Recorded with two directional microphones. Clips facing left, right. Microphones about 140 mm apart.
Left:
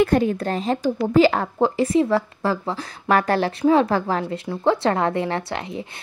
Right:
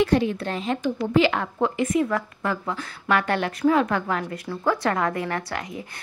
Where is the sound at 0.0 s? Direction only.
45° left (ahead or behind).